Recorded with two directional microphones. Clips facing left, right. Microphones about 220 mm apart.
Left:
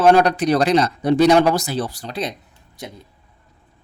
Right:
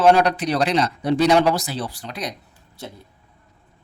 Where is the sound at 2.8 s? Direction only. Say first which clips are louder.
Left 2 dB; 15° left (ahead or behind).